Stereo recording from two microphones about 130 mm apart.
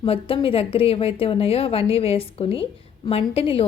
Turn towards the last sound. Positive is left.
turn(degrees=50)  # may be behind; listen again after turning